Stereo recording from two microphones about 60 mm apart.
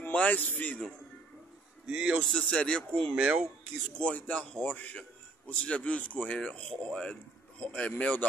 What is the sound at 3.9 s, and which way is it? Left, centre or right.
Speech, left.